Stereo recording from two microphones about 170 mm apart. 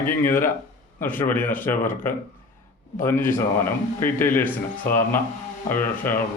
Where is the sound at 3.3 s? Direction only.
15° left (ahead or behind).